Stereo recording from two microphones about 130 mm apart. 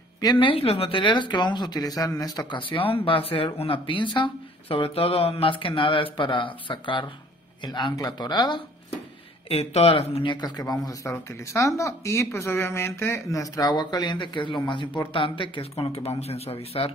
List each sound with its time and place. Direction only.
0.2 s speech: 35° left (ahead or behind)
9.5 s speech: 50° left (ahead or behind)
10.3 s speech: 30° left (ahead or behind); by 16.9 s 50° left (ahead or behind)